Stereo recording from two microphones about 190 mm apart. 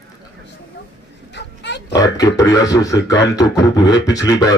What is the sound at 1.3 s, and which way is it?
Dog, 65° left (ahead or behind).